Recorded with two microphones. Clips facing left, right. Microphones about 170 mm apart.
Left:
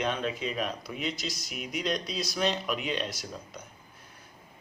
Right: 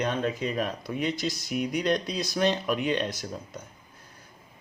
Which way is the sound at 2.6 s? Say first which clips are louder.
Right 5 dB; 45° right (ahead or behind).